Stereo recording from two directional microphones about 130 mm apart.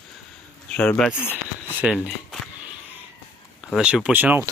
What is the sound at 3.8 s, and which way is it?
Speech, 5° right (ahead or behind).